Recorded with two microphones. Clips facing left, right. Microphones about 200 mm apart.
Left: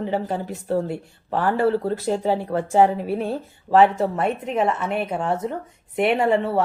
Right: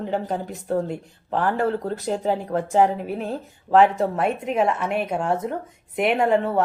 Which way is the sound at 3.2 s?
5° left (ahead or behind).